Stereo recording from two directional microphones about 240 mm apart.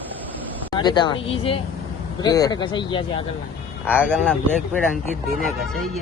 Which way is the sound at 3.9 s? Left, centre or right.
Centre.